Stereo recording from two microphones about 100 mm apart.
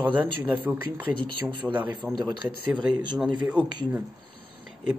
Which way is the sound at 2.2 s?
50° right (ahead or behind).